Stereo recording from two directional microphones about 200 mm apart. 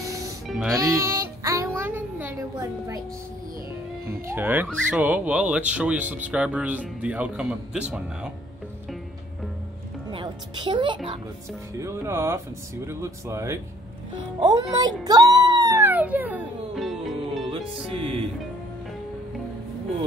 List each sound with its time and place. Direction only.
0.7 s speech: 15° right (ahead or behind)
1.4 s music: 15° right (ahead or behind)
4.3 s speech: 10° right (ahead or behind)
4.6 s speech: 5° left (ahead or behind)
5.0 s speech: 5° right (ahead or behind)
10.1 s a woman's voice: 25° right (ahead or behind)
11.8 s speech: 15° right (ahead or behind)
15.0 s music: 20° right (ahead or behind); by 17.5 s centre (ahead or behind)
17.5 s music: 30° right (ahead or behind)